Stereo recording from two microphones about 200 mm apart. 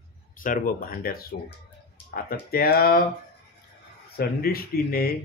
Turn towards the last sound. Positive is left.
turn(degrees=50)  # may be behind; listen again after turning